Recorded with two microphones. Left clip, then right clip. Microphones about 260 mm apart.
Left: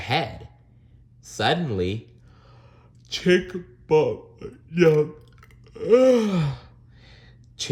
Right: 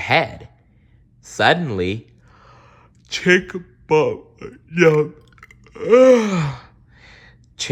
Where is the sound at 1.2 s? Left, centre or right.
Centre.